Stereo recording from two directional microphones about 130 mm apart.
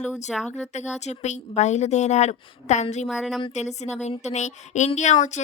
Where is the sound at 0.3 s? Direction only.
Centre (ahead or behind).